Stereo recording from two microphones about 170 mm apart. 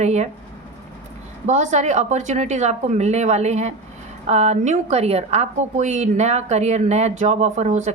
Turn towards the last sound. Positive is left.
turn(degrees=-45)  # may be behind; listen again after turning